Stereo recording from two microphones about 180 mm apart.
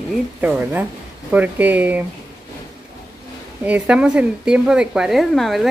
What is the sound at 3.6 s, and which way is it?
A woman's voice, 5° right (ahead or behind).